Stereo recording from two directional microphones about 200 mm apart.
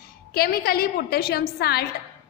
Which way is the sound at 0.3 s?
50° left (ahead or behind).